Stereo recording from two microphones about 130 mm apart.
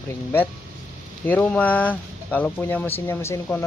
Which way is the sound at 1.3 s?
10° left (ahead or behind).